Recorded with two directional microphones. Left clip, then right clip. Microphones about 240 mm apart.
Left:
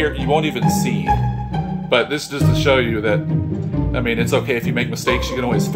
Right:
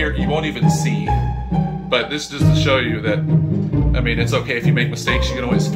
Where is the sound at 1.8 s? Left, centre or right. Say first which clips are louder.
Left 3 dB; left.